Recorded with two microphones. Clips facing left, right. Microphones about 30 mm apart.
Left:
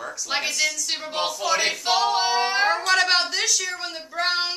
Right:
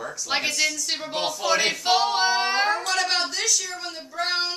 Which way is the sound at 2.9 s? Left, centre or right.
Centre.